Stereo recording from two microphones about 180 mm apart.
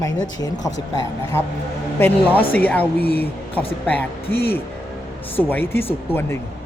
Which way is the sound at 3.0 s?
60° left (ahead or behind).